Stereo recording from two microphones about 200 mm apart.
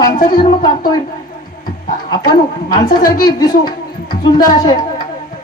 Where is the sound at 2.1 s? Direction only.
20° left (ahead or behind).